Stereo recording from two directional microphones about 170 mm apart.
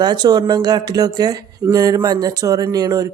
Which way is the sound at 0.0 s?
25° right (ahead or behind).